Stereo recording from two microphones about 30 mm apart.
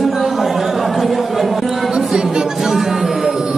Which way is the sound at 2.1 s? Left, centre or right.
Right.